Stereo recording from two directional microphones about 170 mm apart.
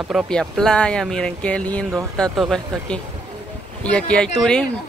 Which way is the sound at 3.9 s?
5° left (ahead or behind).